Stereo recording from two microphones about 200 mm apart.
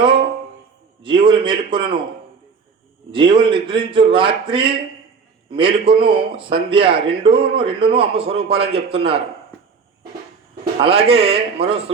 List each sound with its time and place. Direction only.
1.0 s a man's voice: 25° right (ahead or behind)
3.1 s a man's voice: 25° right (ahead or behind)
10.8 s a man's voice: 30° right (ahead or behind)